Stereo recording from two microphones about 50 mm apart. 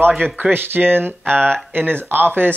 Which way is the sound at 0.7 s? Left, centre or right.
Right.